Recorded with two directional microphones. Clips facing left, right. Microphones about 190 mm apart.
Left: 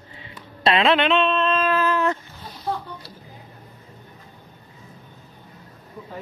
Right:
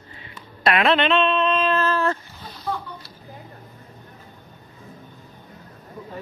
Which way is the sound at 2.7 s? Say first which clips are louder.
Left 1 dB; 35° left (ahead or behind).